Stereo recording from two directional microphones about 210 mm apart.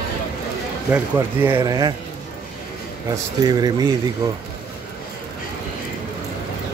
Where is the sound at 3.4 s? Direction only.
20° right (ahead or behind).